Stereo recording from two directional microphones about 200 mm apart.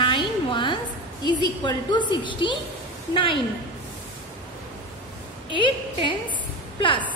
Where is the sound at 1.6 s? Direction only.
20° left (ahead or behind).